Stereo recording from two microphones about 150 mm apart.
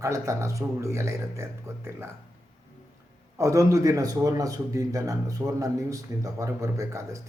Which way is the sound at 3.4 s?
20° right (ahead or behind).